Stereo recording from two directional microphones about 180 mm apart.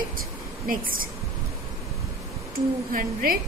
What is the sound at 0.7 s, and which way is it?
Speech, 50° right (ahead or behind).